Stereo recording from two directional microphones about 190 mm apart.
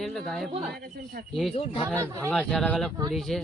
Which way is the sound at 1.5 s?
30° left (ahead or behind).